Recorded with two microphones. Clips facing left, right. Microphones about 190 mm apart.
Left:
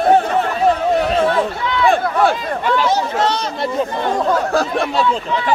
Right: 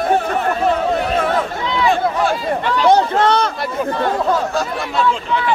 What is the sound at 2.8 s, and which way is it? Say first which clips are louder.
Chatter: right 4 dB; 55° right (ahead or behind).